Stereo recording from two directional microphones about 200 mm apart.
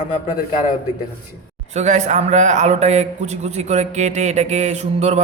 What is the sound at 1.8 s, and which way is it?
A man's voice, 35° right (ahead or behind).